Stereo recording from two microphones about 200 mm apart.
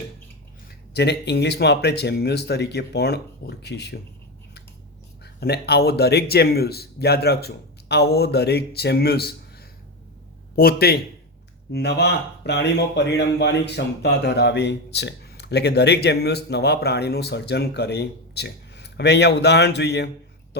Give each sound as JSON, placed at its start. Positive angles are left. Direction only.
{"t": 0.9, "sound": "speech", "side_deg": 55}
{"t": 5.2, "sound": "speech", "side_deg": 55}
{"t": 10.5, "sound": "speech", "side_deg": 50}